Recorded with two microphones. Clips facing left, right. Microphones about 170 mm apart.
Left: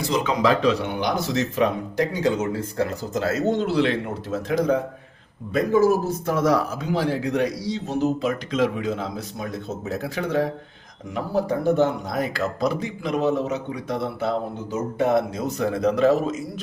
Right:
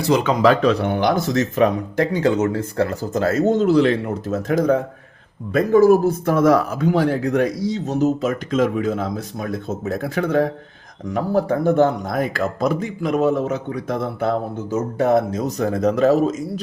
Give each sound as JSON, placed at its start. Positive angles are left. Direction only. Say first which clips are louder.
{"t": 0.0, "sound": "speech", "louder": "right 5 dB", "side_deg": -60}